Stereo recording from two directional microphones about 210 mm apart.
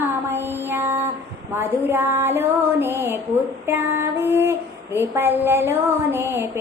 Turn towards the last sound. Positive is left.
turn(degrees=-10)  # may be behind; listen again after turning